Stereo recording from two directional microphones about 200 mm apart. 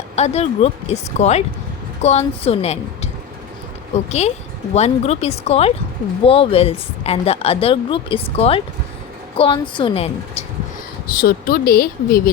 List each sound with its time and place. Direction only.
0.2 s a woman's voice: 30° left (ahead or behind)
11.0 s a woman's voice: 50° left (ahead or behind)